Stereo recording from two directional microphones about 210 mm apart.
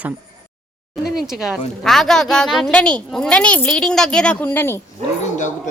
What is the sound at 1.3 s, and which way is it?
Speech, centre (ahead or behind).